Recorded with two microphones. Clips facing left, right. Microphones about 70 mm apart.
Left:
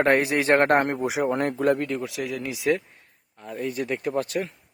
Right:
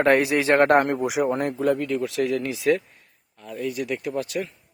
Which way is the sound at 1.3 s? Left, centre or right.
Left.